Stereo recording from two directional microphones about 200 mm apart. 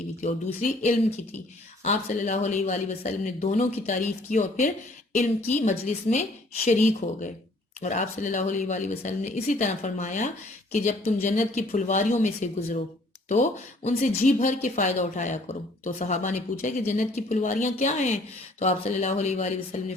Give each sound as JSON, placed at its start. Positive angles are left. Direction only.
{"t": 0.2, "sound": "speech", "side_deg": 40}